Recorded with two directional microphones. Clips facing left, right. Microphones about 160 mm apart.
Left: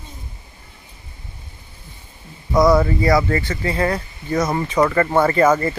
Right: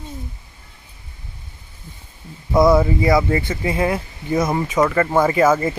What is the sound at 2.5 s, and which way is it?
Speech, 25° right (ahead or behind).